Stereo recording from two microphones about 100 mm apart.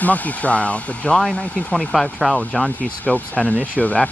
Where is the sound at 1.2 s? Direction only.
Centre (ahead or behind).